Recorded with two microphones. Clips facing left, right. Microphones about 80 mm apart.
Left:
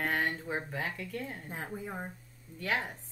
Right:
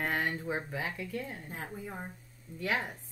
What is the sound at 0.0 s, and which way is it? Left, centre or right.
Speech, centre.